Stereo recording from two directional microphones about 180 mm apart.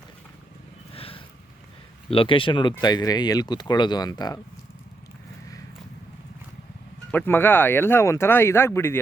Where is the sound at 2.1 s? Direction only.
30° left (ahead or behind).